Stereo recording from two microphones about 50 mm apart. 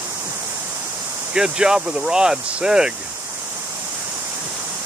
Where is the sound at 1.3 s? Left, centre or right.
Centre.